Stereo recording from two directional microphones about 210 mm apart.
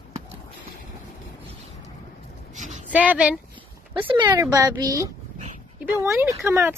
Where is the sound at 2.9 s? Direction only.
5° right (ahead or behind).